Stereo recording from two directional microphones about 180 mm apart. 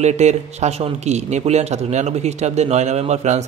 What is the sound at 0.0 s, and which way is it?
A man's voice, 40° right (ahead or behind).